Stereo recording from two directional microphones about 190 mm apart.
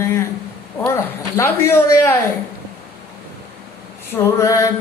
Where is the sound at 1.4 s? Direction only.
10° left (ahead or behind).